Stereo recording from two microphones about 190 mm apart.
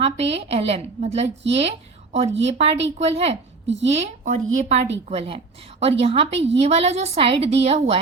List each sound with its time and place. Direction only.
0.0 s a woman's voice: 30° right (ahead or behind)